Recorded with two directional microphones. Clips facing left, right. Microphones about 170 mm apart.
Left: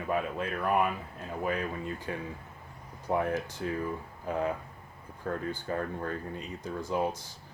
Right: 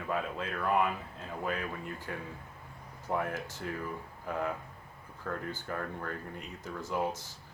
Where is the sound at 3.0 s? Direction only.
15° left (ahead or behind).